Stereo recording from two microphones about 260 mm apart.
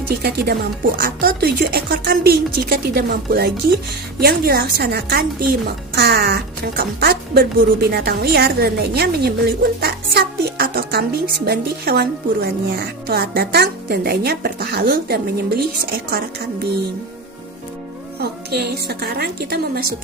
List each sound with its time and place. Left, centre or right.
0.2 s a woman's voice: right
18.2 s a woman's voice: right